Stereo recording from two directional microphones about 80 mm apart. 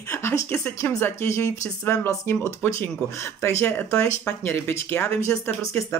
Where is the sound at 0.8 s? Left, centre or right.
Left.